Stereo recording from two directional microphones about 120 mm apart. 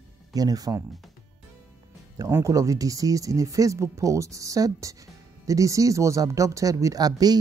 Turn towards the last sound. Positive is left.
turn(degrees=-30)  # may be behind; listen again after turning